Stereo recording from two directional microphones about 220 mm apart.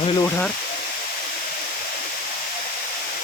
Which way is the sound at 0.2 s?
10° left (ahead or behind).